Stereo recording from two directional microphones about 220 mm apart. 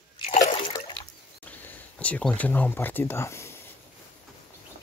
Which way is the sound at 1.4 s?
5° left (ahead or behind).